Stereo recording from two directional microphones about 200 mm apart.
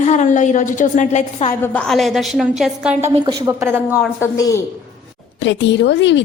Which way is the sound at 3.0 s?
15° right (ahead or behind).